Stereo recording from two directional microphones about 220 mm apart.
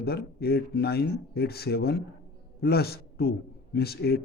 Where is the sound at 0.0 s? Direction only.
45° left (ahead or behind).